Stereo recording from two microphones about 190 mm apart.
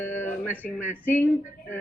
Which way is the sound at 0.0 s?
10° left (ahead or behind).